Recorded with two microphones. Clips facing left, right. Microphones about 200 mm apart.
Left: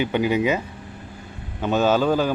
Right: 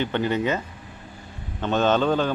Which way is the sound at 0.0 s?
10° left (ahead or behind).